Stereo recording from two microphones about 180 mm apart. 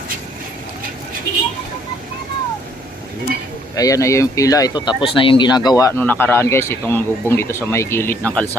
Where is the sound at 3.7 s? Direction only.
20° left (ahead or behind).